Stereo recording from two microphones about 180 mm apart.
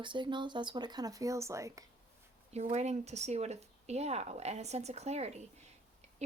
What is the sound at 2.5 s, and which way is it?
Speech, 40° right (ahead or behind).